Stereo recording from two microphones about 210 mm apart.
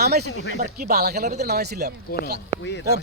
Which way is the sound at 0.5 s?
40° right (ahead or behind).